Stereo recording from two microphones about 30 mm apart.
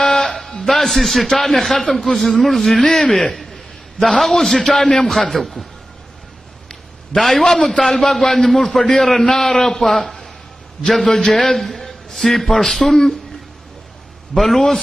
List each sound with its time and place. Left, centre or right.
0.0 s music: centre
0.7 s a man's voice: centre
2.9 s a man's voice: centre
3.2 s a man's voice: centre
7.2 s a man's voice: centre
14.3 s a man's voice: centre